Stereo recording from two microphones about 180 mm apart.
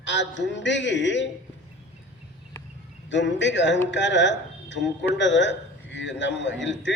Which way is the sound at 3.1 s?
80° left.